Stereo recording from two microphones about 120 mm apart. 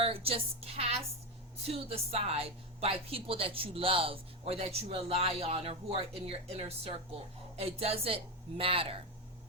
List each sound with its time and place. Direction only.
0.0 s a woman's voice: 55° right (ahead or behind)